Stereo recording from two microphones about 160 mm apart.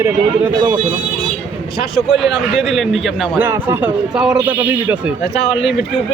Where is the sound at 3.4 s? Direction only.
15° right (ahead or behind).